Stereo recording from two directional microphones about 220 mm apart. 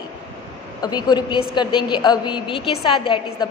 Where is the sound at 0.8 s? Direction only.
20° left (ahead or behind).